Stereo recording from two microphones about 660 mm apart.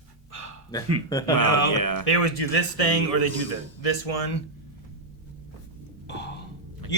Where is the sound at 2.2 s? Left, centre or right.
Left.